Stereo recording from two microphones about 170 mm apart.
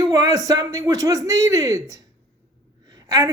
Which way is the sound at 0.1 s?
20° right (ahead or behind).